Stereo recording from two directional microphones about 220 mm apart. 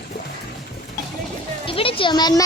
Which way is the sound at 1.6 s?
25° left (ahead or behind).